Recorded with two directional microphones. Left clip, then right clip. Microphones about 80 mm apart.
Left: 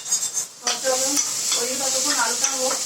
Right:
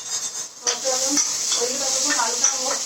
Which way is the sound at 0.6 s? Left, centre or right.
Right.